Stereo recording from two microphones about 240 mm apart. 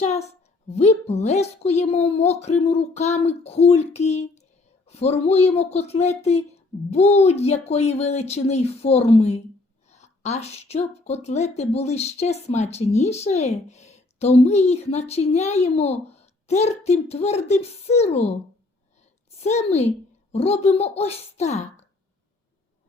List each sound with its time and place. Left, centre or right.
0.0 s a woman's voice: left
19.4 s a woman's voice: left